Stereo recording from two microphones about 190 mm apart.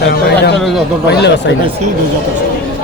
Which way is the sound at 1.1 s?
65° left (ahead or behind).